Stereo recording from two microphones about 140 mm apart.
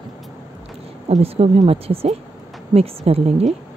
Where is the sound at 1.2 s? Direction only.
45° right (ahead or behind).